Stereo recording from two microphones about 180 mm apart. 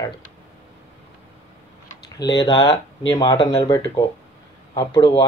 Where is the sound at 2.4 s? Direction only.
20° left (ahead or behind).